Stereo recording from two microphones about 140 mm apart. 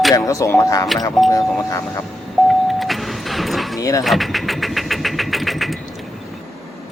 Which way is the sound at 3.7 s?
25° left (ahead or behind).